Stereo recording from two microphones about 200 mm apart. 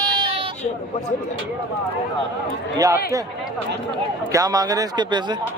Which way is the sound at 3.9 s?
20° right (ahead or behind).